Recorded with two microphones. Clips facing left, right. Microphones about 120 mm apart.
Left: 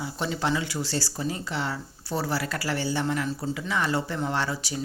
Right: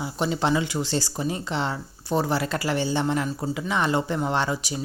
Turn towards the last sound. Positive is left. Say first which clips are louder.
# right 3 dB
turn(degrees=-15)  # may be behind; listen again after turning